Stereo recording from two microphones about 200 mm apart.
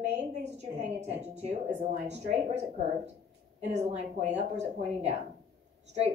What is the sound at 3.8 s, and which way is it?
Speech, 35° right (ahead or behind).